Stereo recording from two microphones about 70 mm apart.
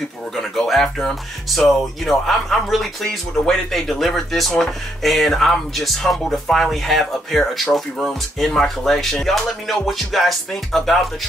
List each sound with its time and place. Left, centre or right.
0.4 s speech: centre